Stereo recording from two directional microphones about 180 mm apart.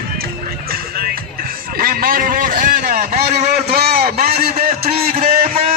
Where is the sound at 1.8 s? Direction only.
55° right (ahead or behind).